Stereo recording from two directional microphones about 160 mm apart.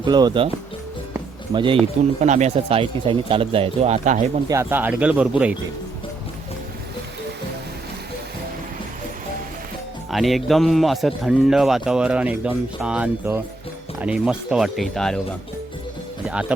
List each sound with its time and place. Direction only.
0.0 s speech: 25° right (ahead or behind)
1.5 s speech: 30° right (ahead or behind)
2.2 s speech: 45° right (ahead or behind)
4.4 s speech: 15° right (ahead or behind)
10.1 s a man's voice: centre (ahead or behind)